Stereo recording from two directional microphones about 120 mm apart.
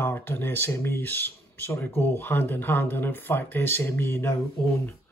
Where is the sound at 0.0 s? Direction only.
15° left (ahead or behind).